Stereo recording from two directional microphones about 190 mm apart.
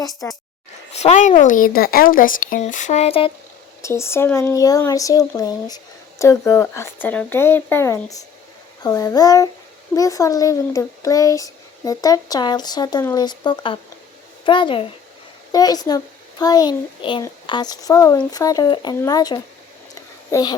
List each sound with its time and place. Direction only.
0.0 s speech: 20° left (ahead or behind)
0.9 s speech: 35° left (ahead or behind)
3.8 s speech: 15° left (ahead or behind)